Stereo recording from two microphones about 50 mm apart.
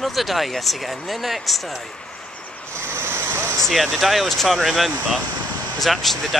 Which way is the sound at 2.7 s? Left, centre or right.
Right.